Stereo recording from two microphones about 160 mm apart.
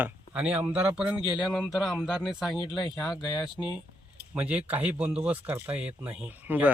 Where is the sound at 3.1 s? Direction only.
25° left (ahead or behind).